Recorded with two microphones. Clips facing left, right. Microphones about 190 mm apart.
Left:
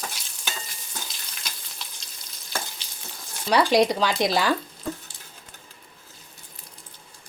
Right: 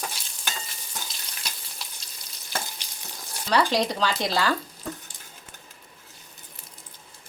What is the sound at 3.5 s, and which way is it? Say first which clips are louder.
Speech: left 4 dB; 10° left (ahead or behind).